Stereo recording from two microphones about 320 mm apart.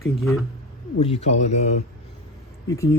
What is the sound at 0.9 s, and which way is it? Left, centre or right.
Speech, centre.